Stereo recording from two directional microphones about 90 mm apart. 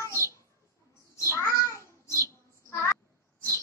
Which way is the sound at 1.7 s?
30° left (ahead or behind).